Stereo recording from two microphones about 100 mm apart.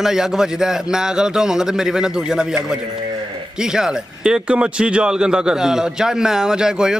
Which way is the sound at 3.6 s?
5° right (ahead or behind).